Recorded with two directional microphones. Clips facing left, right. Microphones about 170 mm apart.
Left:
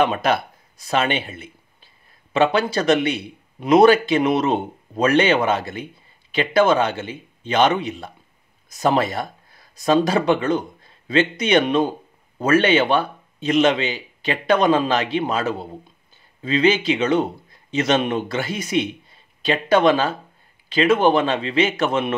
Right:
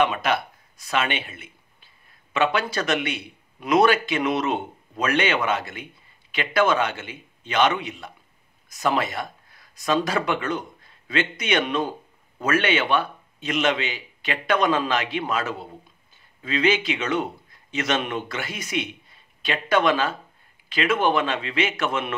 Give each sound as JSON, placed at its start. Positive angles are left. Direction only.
{"t": 0.0, "sound": "a man's voice", "side_deg": 35}